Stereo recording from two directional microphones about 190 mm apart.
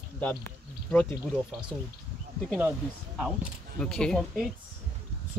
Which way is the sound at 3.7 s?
5° left (ahead or behind).